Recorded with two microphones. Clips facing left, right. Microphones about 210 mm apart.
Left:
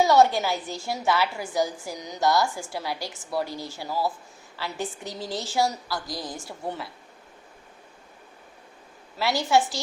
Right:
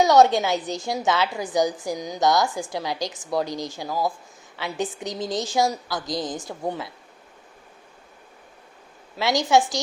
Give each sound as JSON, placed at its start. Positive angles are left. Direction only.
{"t": 0.3, "sound": "a woman's voice", "side_deg": -20}
{"t": 9.1, "sound": "a woman's voice", "side_deg": -20}